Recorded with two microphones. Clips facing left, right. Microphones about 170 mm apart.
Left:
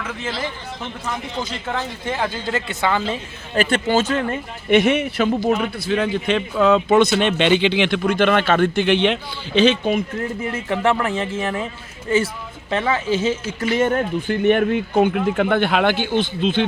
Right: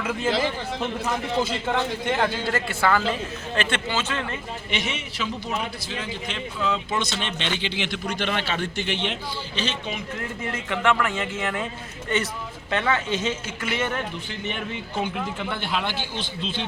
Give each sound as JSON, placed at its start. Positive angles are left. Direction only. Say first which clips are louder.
{"t": 1.0, "sound": "a man's voice", "louder": "right 1 dB", "side_deg": -5}
{"t": 2.5, "sound": "speech", "louder": "left 1 dB", "side_deg": 20}
{"t": 3.5, "sound": "a man's voice", "louder": "left 9 dB", "side_deg": 40}
{"t": 10.5, "sound": "speech", "louder": "left 3 dB", "side_deg": 30}
{"t": 12.7, "sound": "speech", "louder": "left 3 dB", "side_deg": 30}
{"t": 13.2, "sound": "a man's voice", "louder": "left 7 dB", "side_deg": 40}